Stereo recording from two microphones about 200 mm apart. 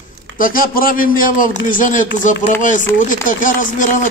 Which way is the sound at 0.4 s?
45° left (ahead or behind).